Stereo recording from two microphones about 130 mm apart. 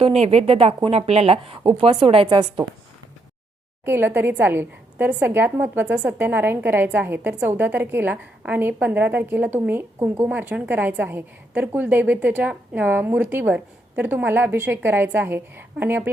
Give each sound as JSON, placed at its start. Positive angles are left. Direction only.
{"t": 0.0, "sound": "speech", "side_deg": -55}
{"t": 3.8, "sound": "a woman's voice", "side_deg": -15}